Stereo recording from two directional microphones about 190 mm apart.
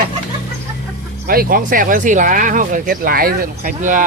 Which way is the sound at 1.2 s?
50° right (ahead or behind).